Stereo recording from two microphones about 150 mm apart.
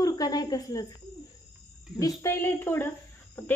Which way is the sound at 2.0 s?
25° left (ahead or behind).